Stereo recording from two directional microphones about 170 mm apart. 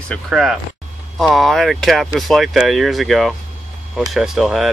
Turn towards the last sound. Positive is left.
turn(degrees=0)  # may be behind; listen again after turning